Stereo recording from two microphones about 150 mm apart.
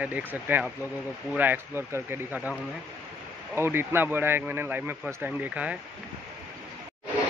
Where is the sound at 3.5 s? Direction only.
15° right (ahead or behind).